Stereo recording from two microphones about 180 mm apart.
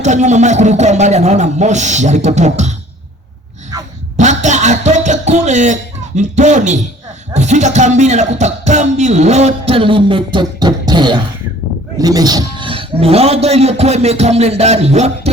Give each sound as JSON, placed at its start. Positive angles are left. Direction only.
{"t": 0.0, "sound": "speech", "side_deg": -40}
{"t": 4.2, "sound": "music", "side_deg": -40}
{"t": 7.3, "sound": "speech", "side_deg": -40}